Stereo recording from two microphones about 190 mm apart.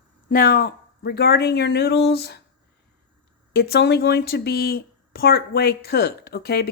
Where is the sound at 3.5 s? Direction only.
55° left (ahead or behind).